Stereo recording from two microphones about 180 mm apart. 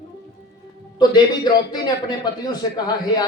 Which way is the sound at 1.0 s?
25° left (ahead or behind).